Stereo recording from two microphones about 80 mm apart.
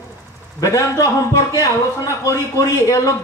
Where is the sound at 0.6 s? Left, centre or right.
Left.